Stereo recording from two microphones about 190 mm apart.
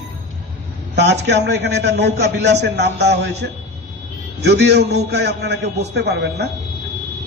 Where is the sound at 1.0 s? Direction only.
65° right (ahead or behind).